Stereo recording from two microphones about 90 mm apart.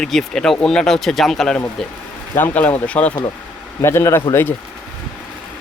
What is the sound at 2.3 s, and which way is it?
Speech, 20° left (ahead or behind).